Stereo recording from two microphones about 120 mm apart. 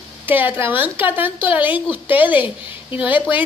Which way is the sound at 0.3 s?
15° right (ahead or behind).